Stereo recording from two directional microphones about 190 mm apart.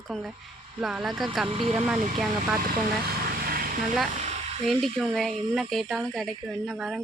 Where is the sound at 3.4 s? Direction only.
50° right (ahead or behind).